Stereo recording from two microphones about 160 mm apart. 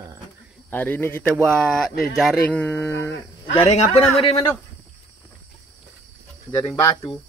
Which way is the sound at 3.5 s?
45° left (ahead or behind).